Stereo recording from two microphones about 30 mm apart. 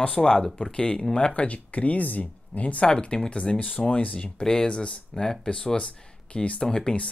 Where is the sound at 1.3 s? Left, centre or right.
Left.